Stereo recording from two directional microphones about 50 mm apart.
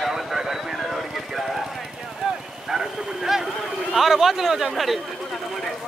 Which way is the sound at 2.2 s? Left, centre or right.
Centre.